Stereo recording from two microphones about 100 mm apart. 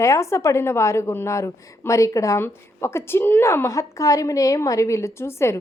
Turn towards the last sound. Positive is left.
turn(degrees=25)  # may be behind; listen again after turning